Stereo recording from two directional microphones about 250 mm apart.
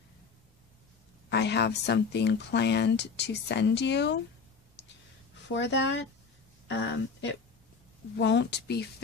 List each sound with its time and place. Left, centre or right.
1.3 s speech: left
5.5 s speech: left